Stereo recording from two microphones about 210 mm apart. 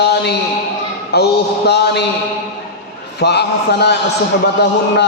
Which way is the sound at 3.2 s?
50° left (ahead or behind).